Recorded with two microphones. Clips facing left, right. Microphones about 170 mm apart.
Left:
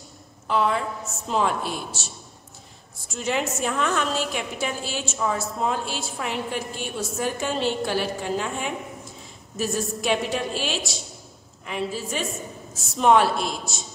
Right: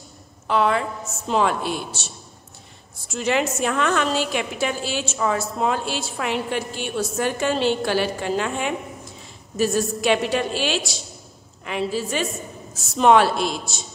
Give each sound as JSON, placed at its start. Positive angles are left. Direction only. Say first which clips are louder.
{"t": 0.5, "sound": "a woman's voice", "louder": "right 3 dB", "side_deg": -80}
{"t": 0.7, "sound": "a woman's voice", "louder": "right 3 dB", "side_deg": 0}